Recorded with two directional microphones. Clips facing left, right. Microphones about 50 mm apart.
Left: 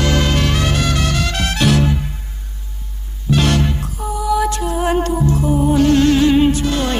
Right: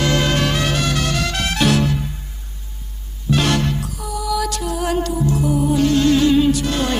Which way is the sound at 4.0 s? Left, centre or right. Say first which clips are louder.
Left 6 dB; left.